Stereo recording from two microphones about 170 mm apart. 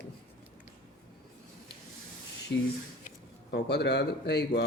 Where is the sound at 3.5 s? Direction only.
75° left (ahead or behind).